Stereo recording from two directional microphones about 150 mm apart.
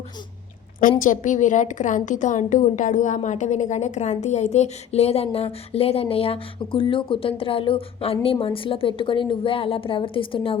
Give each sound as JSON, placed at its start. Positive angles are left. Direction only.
{"t": 0.8, "sound": "a woman's voice", "side_deg": 65}